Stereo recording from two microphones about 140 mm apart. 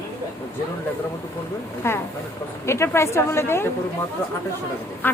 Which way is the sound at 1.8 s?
20° left (ahead or behind).